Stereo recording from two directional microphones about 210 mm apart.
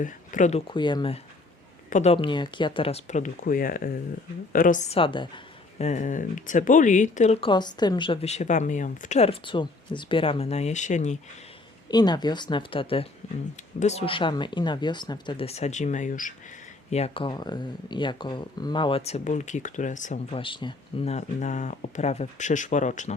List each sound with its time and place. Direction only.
0.0 s speech: 35° left (ahead or behind)
0.7 s speech: 20° left (ahead or behind)
5.8 s speech: 35° left (ahead or behind)
11.9 s speech: 20° left (ahead or behind); by 20.4 s 35° left (ahead or behind)
20.4 s speech: 25° left (ahead or behind)